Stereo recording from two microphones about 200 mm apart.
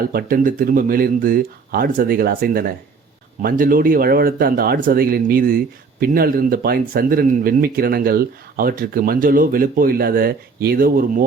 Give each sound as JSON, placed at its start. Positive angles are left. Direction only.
{"t": 0.1, "sound": "speech", "side_deg": -45}